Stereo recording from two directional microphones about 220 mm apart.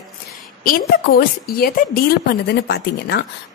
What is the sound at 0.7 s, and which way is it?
A woman's voice, 40° left (ahead or behind).